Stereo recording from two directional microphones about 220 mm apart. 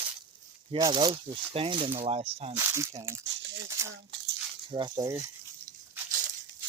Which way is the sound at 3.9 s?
55° right (ahead or behind).